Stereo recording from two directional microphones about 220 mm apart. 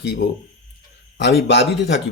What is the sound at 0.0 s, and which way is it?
Speech, 50° left (ahead or behind).